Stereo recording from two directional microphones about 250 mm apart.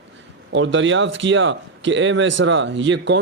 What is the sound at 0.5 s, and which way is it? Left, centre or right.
A man's voice, right.